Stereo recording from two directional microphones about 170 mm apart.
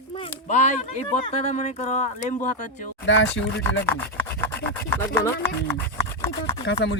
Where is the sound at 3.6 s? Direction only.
10° left (ahead or behind).